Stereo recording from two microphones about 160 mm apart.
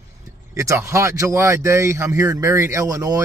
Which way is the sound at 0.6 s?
20° right (ahead or behind).